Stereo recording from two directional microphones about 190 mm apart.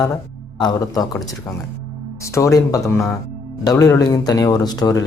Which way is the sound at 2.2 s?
15° left (ahead or behind).